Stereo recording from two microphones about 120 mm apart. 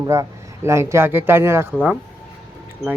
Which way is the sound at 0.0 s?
25° right (ahead or behind).